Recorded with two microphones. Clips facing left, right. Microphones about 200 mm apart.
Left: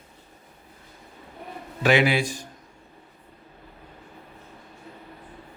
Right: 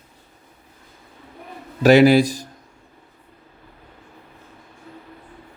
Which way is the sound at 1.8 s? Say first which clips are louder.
Right 9 dB; 40° right (ahead or behind).